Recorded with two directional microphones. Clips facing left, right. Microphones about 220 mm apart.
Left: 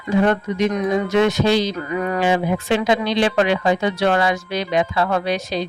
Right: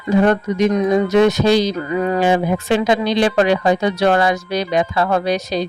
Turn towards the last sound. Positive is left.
turn(degrees=-40)  # may be behind; listen again after turning